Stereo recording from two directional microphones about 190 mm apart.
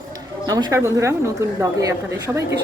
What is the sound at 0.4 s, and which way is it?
A woman's voice, 20° right (ahead or behind).